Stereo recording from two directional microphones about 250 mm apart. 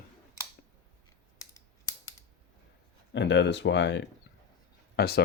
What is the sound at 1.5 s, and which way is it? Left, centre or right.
Computer keyboard, centre.